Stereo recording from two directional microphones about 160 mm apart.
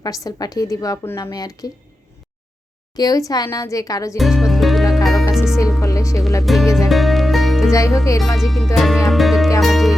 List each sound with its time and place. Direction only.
0.0 s speech: 25° left (ahead or behind)
2.9 s speech: 25° left (ahead or behind)
4.2 s music: centre (ahead or behind)
5.8 s music: 20° left (ahead or behind)
6.4 s music: centre (ahead or behind)
7.7 s speech: 20° left (ahead or behind)
8.4 s music: centre (ahead or behind)